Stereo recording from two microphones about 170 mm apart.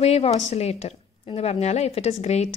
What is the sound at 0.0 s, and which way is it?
A woman's voice, 40° left (ahead or behind).